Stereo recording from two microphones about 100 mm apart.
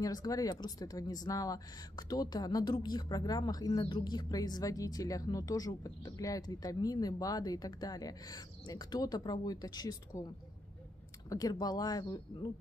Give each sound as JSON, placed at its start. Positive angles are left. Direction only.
{"t": 0.0, "sound": "speech", "side_deg": 40}